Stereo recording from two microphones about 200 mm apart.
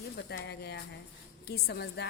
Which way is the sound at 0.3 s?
55° left (ahead or behind).